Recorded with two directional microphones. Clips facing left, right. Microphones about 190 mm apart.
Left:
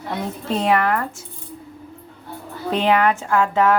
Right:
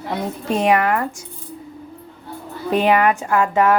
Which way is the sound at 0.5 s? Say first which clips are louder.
Right 2 dB; 15° right (ahead or behind).